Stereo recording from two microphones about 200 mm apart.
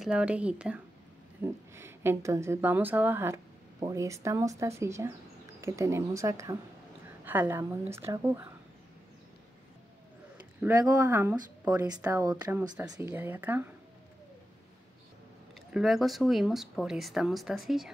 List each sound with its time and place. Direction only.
0.0 s speech: 5° right (ahead or behind)
10.6 s speech: 15° right (ahead or behind)
15.7 s speech: centre (ahead or behind)